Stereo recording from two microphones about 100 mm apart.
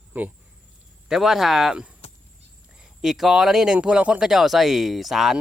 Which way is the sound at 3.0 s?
5° right (ahead or behind).